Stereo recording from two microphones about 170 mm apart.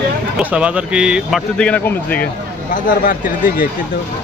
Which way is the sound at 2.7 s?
55° left (ahead or behind).